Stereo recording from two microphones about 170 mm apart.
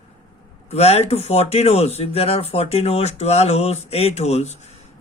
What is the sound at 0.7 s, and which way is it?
Speech, 35° left (ahead or behind).